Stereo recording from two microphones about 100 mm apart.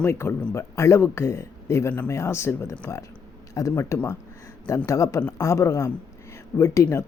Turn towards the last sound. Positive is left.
turn(degrees=30)  # may be behind; listen again after turning